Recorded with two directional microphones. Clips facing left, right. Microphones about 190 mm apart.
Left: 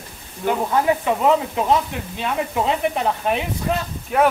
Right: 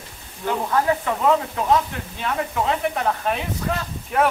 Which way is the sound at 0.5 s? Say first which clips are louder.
Left 2 dB; 15° left (ahead or behind).